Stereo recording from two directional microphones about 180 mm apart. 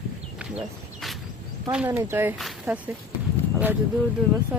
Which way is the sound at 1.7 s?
10° right (ahead or behind).